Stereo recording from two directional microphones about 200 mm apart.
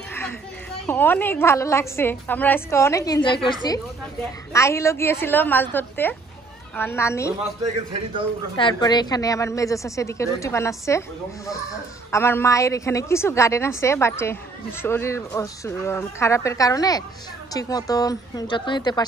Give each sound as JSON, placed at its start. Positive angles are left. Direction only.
{"t": 0.1, "sound": "a sound", "side_deg": 10}
{"t": 0.8, "sound": "a woman's voice", "side_deg": 10}
{"t": 8.5, "sound": "a woman's voice", "side_deg": 25}